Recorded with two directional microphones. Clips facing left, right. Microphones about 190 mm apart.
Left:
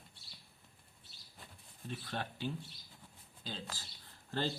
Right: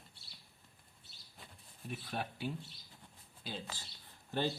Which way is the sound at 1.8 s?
10° right (ahead or behind).